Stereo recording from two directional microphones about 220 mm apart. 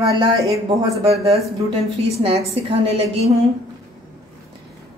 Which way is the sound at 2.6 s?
25° right (ahead or behind).